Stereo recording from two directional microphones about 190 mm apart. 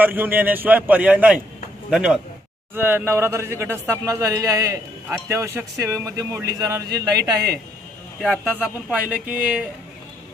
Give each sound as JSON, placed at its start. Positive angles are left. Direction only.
{"t": 0.0, "sound": "a man's voice", "side_deg": -10}
{"t": 7.2, "sound": "a man's voice", "side_deg": -60}
{"t": 8.2, "sound": "a man's voice", "side_deg": 5}